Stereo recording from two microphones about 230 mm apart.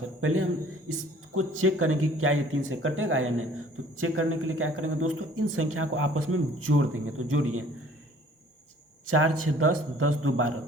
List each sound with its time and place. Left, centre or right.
0.2 s speech: right
9.0 s a man's voice: right